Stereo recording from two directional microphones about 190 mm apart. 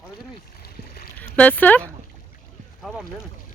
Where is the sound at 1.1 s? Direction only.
10° left (ahead or behind).